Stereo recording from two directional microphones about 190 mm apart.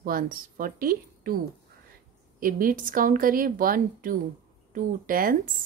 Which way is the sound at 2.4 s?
45° right (ahead or behind).